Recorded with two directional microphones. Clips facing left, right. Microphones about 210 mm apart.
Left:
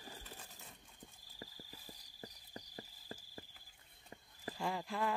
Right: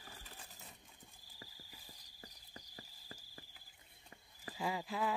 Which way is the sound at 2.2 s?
30° left (ahead or behind).